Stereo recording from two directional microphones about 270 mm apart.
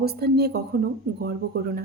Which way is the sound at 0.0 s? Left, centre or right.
Right.